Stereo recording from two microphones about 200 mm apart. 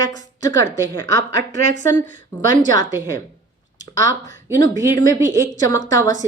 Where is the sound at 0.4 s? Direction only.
15° left (ahead or behind).